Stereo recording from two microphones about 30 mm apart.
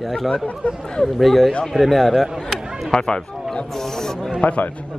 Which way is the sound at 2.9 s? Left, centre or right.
Left.